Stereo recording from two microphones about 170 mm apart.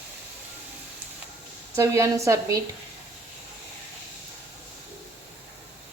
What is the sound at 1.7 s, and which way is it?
Speech, 15° right (ahead or behind).